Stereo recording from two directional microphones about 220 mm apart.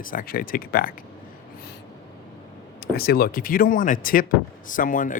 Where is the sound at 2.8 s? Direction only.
45° left (ahead or behind).